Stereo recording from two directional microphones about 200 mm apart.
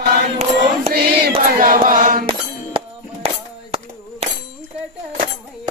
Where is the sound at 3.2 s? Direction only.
30° right (ahead or behind).